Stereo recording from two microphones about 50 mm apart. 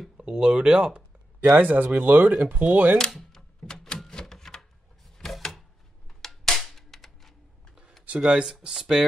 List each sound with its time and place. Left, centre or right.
0.2 s speech: right
1.5 s speech: right
3.1 s a sound: centre
8.2 s speech: centre